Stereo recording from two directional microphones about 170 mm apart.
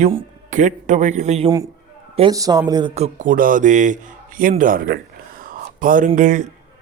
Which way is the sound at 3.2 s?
55° right (ahead or behind).